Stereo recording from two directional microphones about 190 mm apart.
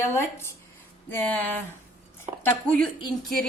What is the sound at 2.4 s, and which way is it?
Speech, 5° left (ahead or behind).